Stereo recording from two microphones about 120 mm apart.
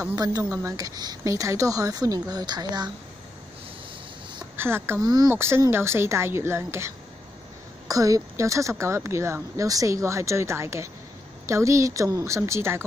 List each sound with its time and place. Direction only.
0.1 s speech: 30° right (ahead or behind)
4.6 s speech: 20° right (ahead or behind)
5.0 s speech: 35° right (ahead or behind)
5.3 s speech: 20° right (ahead or behind)
7.9 s speech: 30° right (ahead or behind)